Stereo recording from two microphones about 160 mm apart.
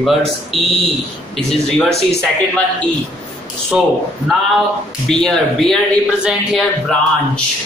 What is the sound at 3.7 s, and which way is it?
Speech, 5° right (ahead or behind).